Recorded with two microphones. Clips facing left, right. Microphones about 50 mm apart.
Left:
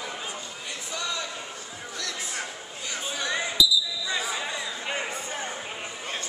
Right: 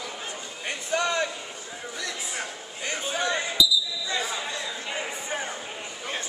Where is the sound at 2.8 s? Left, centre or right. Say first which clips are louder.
Right 4 dB; right.